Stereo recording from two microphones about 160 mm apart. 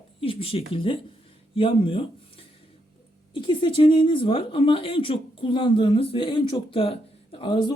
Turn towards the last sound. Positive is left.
turn(degrees=30)  # may be behind; listen again after turning